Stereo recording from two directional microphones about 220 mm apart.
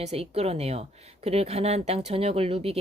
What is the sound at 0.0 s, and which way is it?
Speech, 30° right (ahead or behind).